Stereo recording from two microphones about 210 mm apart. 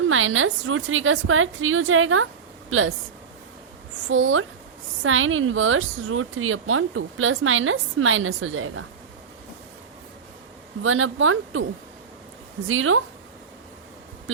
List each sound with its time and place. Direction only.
0.1 s a woman's voice: 75° right (ahead or behind)
4.1 s a woman's voice: 70° right (ahead or behind)
10.8 s a woman's voice: 70° right (ahead or behind)
12.6 s a woman's voice: 75° right (ahead or behind)